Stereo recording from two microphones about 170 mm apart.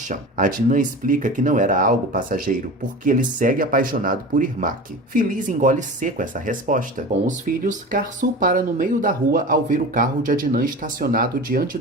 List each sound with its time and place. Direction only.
0.1 s speech: 50° right (ahead or behind)